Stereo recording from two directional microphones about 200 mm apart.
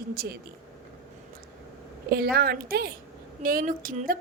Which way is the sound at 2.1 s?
50° right (ahead or behind).